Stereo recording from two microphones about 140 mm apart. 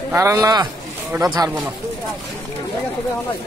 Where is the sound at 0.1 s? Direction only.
20° right (ahead or behind).